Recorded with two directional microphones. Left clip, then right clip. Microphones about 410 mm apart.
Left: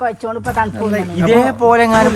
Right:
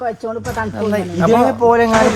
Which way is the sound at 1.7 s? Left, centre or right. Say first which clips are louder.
Left 3 dB; centre.